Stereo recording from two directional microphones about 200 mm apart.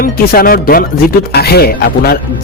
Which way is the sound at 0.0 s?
45° left (ahead or behind).